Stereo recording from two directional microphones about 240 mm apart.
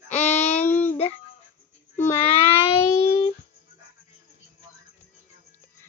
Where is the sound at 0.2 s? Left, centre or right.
Centre.